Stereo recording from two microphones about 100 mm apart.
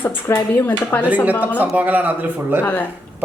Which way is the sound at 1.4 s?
15° right (ahead or behind).